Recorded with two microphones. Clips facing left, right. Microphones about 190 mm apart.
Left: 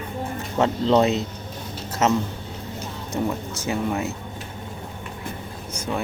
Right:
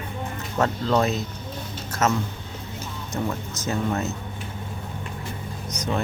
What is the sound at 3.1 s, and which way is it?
Speech, 20° left (ahead or behind).